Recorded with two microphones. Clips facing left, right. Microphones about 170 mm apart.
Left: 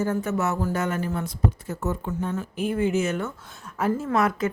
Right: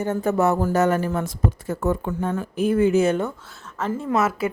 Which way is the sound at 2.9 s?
35° right (ahead or behind).